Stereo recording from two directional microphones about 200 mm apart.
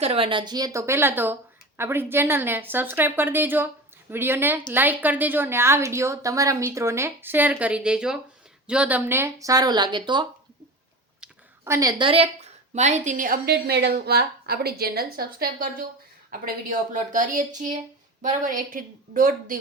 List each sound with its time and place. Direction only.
0.0 s a woman's voice: 30° right (ahead or behind)